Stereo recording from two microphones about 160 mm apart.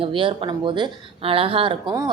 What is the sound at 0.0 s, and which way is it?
A woman's voice, 35° right (ahead or behind).